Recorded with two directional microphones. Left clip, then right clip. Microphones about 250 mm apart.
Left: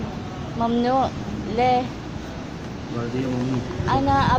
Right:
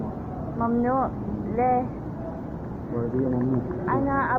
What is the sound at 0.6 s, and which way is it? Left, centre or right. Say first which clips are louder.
Speech: left 4 dB; left.